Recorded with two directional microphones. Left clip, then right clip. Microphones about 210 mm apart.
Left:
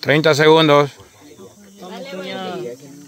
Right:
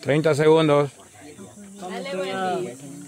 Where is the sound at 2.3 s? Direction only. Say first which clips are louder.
Right 2 dB; 55° left (ahead or behind).